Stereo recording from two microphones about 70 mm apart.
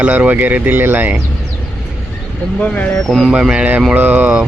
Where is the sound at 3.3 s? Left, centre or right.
Centre.